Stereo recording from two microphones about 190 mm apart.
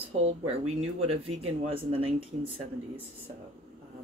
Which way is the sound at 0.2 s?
35° right (ahead or behind).